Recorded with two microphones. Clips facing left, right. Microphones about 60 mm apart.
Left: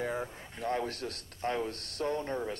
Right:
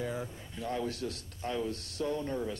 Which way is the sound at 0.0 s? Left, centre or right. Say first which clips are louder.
Left 2 dB; left.